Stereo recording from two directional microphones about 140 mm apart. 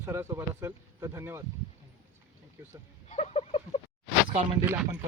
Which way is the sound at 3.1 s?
50° left (ahead or behind).